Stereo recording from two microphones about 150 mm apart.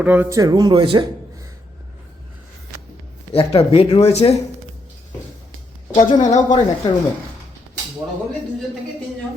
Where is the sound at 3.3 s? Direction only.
40° left (ahead or behind).